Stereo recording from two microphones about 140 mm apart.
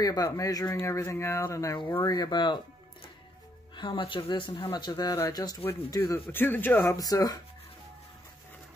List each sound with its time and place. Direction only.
0.0 s speech: 25° left (ahead or behind)
3.7 s speech: 35° left (ahead or behind)